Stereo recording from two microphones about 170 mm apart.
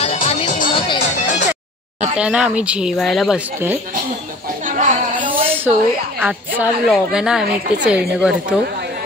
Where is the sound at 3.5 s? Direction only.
10° right (ahead or behind).